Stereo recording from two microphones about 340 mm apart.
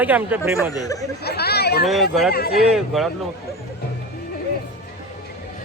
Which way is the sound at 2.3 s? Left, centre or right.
Left.